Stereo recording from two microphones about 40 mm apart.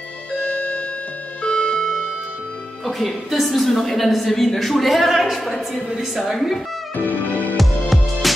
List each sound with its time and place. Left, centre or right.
0.5 s music: left
1.4 s music: left
2.8 s a woman's voice: centre
7.1 s music: left
7.5 s music: centre